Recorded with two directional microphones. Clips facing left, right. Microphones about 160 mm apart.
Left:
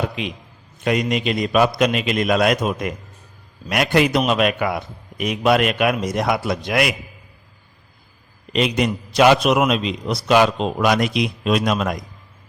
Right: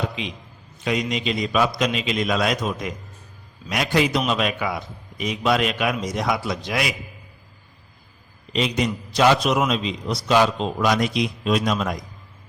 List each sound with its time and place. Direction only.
0.8 s a man's voice: 55° left (ahead or behind)
8.5 s a man's voice: 60° left (ahead or behind)